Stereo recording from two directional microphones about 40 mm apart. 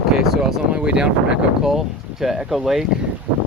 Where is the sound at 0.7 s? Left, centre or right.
Right.